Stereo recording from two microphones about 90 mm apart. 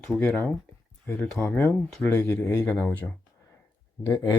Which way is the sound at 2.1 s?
30° left (ahead or behind).